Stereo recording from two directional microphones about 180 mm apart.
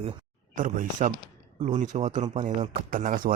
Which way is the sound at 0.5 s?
45° right (ahead or behind).